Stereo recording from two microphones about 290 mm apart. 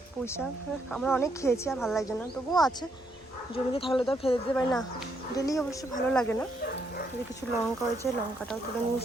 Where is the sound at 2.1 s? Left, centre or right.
Centre.